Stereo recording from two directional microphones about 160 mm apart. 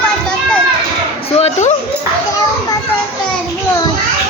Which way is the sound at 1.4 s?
45° left (ahead or behind).